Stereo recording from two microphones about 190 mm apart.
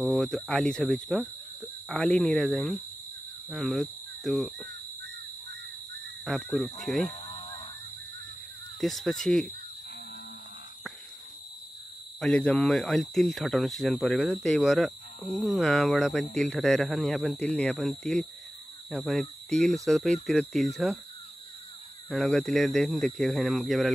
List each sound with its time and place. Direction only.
0.0 s speech: centre (ahead or behind)
3.4 s cricket: centre (ahead or behind)
6.2 s speech: centre (ahead or behind)
7.2 s a sound: 25° left (ahead or behind)
8.8 s speech: centre (ahead or behind)
12.2 s speech: 5° left (ahead or behind)
22.1 s speech: centre (ahead or behind)